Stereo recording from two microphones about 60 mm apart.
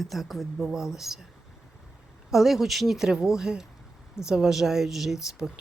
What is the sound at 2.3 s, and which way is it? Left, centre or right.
Speech, centre.